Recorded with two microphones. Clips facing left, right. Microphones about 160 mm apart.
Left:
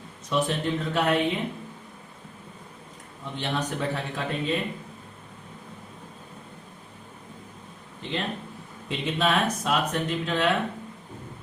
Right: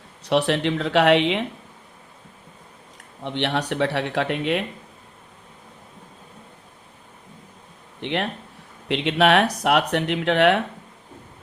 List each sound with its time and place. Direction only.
0.3 s speech: 80° right
3.2 s speech: 75° right (ahead or behind)
8.0 s speech: 70° right (ahead or behind)